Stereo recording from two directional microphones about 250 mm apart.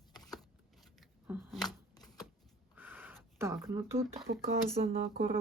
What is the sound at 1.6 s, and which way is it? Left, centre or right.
Shuffling cards, centre.